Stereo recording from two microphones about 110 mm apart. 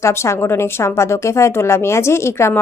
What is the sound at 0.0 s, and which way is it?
Speech, 25° left (ahead or behind).